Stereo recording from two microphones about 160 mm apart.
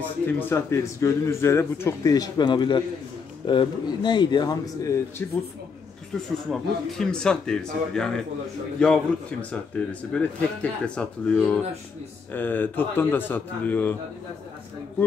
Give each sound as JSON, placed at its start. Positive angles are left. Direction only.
{"t": 0.4, "sound": "speech", "side_deg": 15}
{"t": 6.1, "sound": "speech", "side_deg": 0}